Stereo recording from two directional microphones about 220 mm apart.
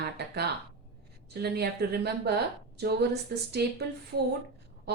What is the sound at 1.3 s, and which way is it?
Speech, 45° right (ahead or behind).